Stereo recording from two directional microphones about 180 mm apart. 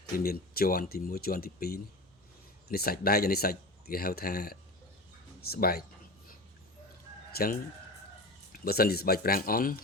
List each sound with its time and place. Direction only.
0.2 s speech: 55° left (ahead or behind)
7.3 s speech: 60° left (ahead or behind)
8.6 s speech: 60° left (ahead or behind)